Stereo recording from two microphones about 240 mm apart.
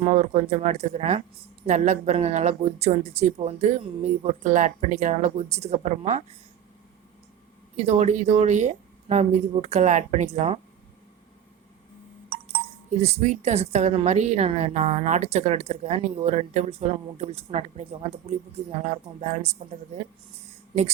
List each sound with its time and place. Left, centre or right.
0.0 s speech: right
7.8 s speech: right
12.5 s speech: right